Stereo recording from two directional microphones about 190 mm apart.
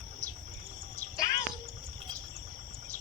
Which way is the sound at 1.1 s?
20° left (ahead or behind).